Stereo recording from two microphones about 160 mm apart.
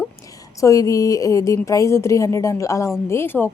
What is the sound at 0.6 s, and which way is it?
A woman's voice, 20° left (ahead or behind).